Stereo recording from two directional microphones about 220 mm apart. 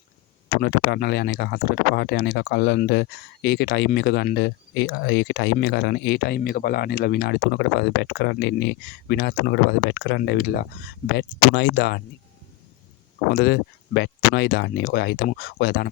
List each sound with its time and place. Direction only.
0.5 s speech: 45° left (ahead or behind)
13.3 s speech: 50° left (ahead or behind)